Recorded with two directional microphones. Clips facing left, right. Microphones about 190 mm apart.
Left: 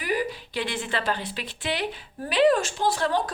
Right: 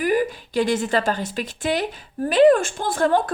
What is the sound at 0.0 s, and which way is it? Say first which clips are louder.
A woman's voice: right 7 dB; 50° right (ahead or behind).